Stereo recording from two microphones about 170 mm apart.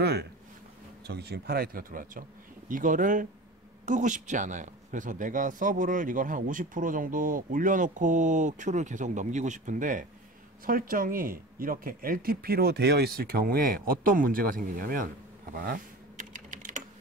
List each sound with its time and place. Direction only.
0.0 s a sound: 75° right (ahead or behind)
1.0 s a man's voice: 70° right (ahead or behind); by 15.0 s 55° right (ahead or behind)
15.5 s typing: 55° right (ahead or behind)